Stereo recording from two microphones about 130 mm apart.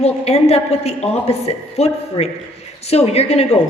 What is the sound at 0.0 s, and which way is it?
A woman's voice, 50° left (ahead or behind).